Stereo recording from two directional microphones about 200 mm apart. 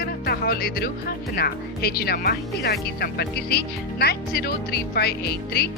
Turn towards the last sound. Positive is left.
turn(degrees=50)  # may be behind; listen again after turning